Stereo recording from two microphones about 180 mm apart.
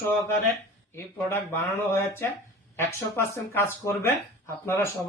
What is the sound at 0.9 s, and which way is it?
Speech, 15° left (ahead or behind).